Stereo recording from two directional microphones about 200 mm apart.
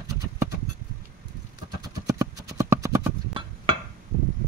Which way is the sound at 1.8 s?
15° right (ahead or behind).